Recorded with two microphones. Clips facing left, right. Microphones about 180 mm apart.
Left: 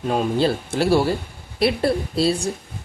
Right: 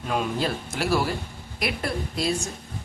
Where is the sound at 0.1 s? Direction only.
30° left (ahead or behind).